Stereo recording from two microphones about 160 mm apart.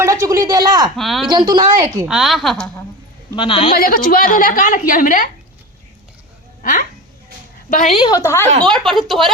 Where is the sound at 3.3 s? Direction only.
30° left (ahead or behind).